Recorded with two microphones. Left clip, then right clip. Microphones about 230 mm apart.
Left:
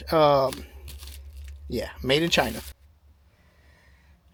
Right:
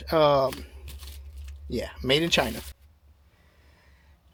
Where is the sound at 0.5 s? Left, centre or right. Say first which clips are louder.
Left 1 dB; centre.